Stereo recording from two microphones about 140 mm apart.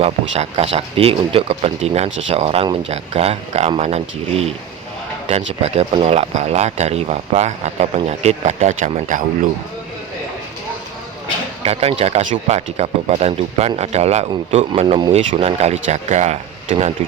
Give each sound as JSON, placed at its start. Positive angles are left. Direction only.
{"t": 0.0, "sound": "speech", "side_deg": -45}
{"t": 11.6, "sound": "speech", "side_deg": -45}